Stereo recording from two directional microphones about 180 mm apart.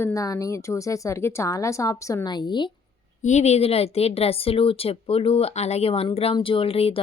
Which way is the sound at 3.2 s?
40° left (ahead or behind).